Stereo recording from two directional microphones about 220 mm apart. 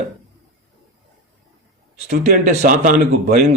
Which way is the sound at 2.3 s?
40° right (ahead or behind).